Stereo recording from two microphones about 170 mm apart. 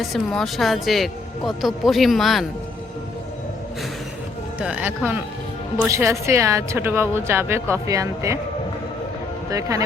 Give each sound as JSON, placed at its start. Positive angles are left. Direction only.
{"t": 0.0, "sound": "speech", "side_deg": 0}
{"t": 4.6, "sound": "speech", "side_deg": -10}
{"t": 9.5, "sound": "speech", "side_deg": -20}